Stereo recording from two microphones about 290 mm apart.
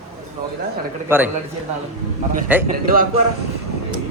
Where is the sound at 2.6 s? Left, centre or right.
Right.